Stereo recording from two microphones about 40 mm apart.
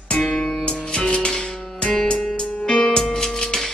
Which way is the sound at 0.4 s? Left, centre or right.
Left.